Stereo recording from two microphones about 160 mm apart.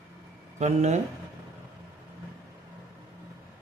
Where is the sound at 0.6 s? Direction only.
45° right (ahead or behind).